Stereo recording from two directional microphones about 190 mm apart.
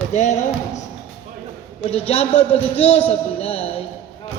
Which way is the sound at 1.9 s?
30° left (ahead or behind).